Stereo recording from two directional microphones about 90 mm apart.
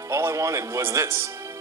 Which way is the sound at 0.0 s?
30° right (ahead or behind).